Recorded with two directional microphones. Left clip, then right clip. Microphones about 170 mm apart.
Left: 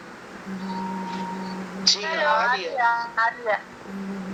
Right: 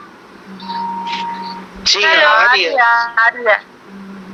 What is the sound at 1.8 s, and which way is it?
Speech, 60° right (ahead or behind).